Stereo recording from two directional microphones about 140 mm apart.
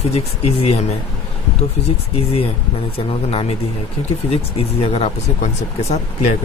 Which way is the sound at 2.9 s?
40° left (ahead or behind).